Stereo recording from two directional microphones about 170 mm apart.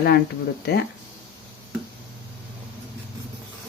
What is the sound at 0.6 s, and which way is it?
Speech, 70° left (ahead or behind).